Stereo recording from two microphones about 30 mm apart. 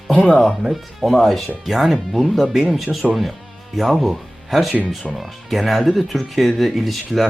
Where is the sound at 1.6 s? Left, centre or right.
Centre.